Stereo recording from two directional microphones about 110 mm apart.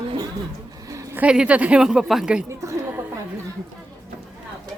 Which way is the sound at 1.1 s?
10° right (ahead or behind).